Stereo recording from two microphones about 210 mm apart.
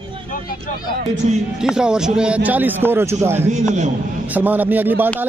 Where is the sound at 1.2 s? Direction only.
30° right (ahead or behind).